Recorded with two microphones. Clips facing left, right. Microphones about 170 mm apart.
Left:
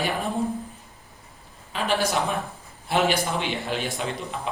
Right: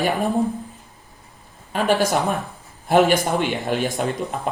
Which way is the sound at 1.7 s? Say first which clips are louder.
Right 5 dB; 45° right (ahead or behind).